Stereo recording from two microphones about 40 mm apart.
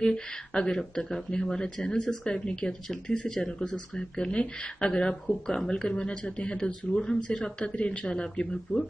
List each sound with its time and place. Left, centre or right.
0.0 s speech: centre
2.9 s speech: centre; by 8.1 s left
8.1 s speech: left